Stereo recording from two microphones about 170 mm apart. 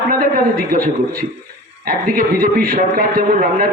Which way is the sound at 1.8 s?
55° right (ahead or behind).